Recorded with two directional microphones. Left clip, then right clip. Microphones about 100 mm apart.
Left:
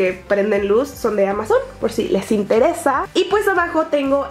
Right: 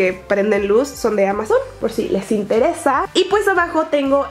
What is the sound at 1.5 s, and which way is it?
A woman's voice, centre (ahead or behind).